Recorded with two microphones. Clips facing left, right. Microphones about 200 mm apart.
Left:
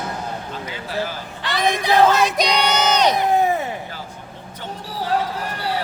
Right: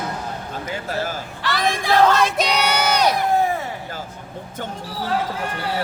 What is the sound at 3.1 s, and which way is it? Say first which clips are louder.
Crowd: left 1 dB; 20° left (ahead or behind).